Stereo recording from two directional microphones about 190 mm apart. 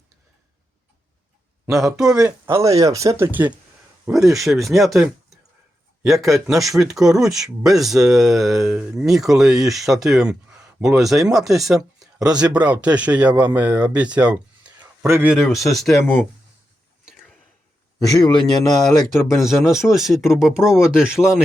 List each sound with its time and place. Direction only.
1.7 s speech: centre (ahead or behind)
2.1 s speech: 15° right (ahead or behind); by 16.2 s 5° left (ahead or behind)
18.0 s speech: 20° left (ahead or behind)
19.1 s speech: centre (ahead or behind)